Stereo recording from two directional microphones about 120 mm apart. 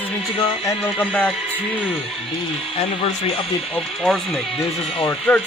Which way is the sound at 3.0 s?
50° left (ahead or behind).